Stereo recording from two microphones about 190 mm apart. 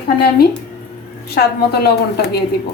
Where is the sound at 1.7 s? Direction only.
55° left (ahead or behind).